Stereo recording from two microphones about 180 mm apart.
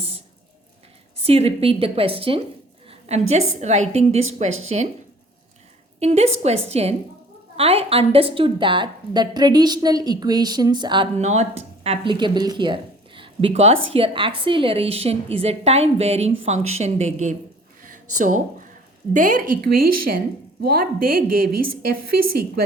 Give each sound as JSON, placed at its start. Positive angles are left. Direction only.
{"t": 1.1, "sound": "a woman's voice", "side_deg": -35}
{"t": 6.0, "sound": "a woman's voice", "side_deg": -35}
{"t": 11.2, "sound": "a woman's voice", "side_deg": -40}
{"t": 17.8, "sound": "a sound", "side_deg": -45}
{"t": 19.1, "sound": "a woman's voice", "side_deg": -45}